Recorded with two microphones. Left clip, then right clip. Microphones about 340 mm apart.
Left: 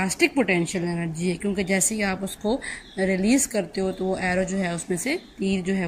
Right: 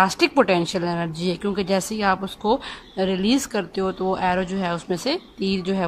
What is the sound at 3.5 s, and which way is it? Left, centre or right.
A woman's voice, right.